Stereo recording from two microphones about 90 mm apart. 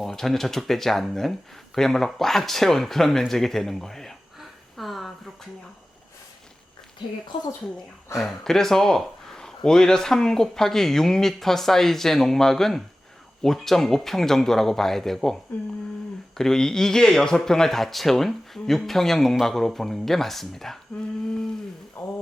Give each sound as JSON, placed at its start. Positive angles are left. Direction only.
{"t": 0.0, "sound": "speech", "side_deg": 0}
{"t": 8.2, "sound": "speech", "side_deg": 5}
{"t": 16.4, "sound": "speech", "side_deg": 5}
{"t": 22.0, "sound": "speech", "side_deg": 20}